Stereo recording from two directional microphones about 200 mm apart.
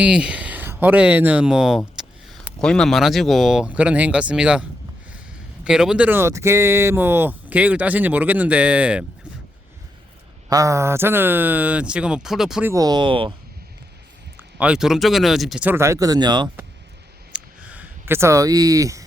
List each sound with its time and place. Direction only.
0.0 s speech: 5° right (ahead or behind)
5.6 s speech: 5° right (ahead or behind)
10.5 s speech: 15° right (ahead or behind)
12.7 s speech: 20° right (ahead or behind)
14.6 s speech: 5° right (ahead or behind); by 16.5 s 20° right (ahead or behind)
17.3 s a sound: 5° right (ahead or behind)